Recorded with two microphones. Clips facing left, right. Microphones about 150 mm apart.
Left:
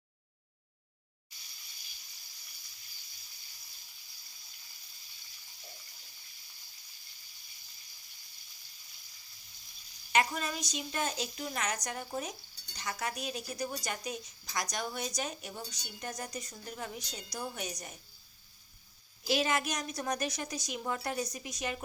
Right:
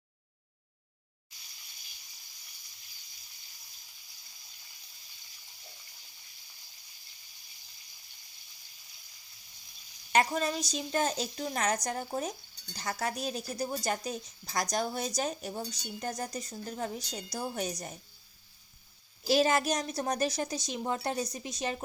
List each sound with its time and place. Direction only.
10.1 s speech: 40° right (ahead or behind)
19.2 s speech: 35° right (ahead or behind)